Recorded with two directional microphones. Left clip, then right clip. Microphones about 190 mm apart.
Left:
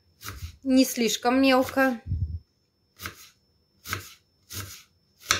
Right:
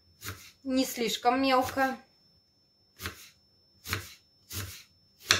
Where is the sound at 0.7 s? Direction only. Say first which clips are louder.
Left 7 dB; 30° left (ahead or behind).